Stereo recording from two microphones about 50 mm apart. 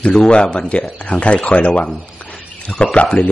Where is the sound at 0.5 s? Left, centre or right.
Left.